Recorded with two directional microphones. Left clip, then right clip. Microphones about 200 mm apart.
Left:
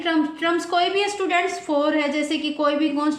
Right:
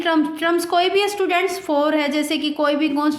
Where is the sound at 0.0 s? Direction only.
40° right (ahead or behind).